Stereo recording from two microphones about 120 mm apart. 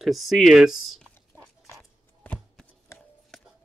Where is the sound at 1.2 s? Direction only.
20° left (ahead or behind).